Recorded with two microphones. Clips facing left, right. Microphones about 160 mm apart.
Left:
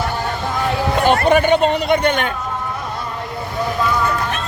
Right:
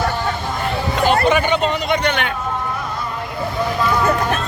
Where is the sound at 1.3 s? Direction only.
45° left (ahead or behind).